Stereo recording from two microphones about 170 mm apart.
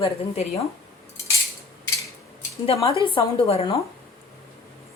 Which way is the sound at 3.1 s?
35° left (ahead or behind).